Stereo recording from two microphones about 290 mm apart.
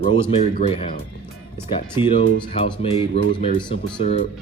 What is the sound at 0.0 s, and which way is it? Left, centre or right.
Speech, left.